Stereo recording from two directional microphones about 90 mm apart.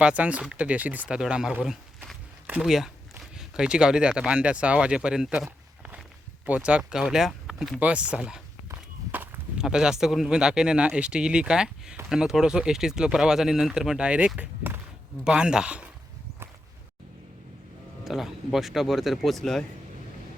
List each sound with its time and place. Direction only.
0.0 s speech: 15° right (ahead or behind)
2.6 s speech: 5° right (ahead or behind)
7.8 s speech: 15° right (ahead or behind)
9.1 s walk: 20° right (ahead or behind)
9.6 s speech: 5° right (ahead or behind)
18.0 s speech: 5° right (ahead or behind)